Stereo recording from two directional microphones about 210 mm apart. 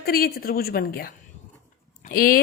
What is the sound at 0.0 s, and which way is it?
A woman's voice, 45° left (ahead or behind).